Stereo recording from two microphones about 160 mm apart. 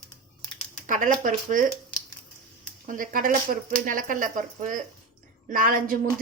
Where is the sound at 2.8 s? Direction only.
55° right (ahead or behind).